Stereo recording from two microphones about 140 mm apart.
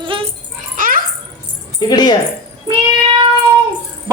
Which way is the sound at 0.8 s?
85° right.